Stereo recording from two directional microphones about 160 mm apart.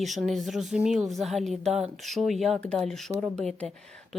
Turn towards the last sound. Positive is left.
turn(degrees=5)  # may be behind; listen again after turning